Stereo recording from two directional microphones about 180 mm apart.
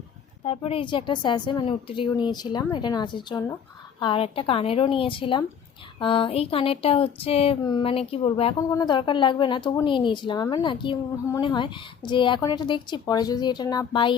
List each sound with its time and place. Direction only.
0.4 s a woman's voice: 35° left (ahead or behind)
8.5 s a woman's voice: 20° left (ahead or behind)